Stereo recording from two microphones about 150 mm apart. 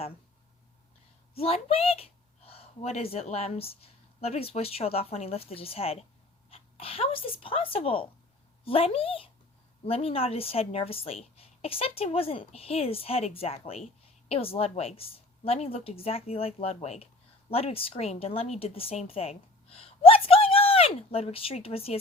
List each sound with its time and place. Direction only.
1.4 s a woman's voice: 40° left (ahead or behind)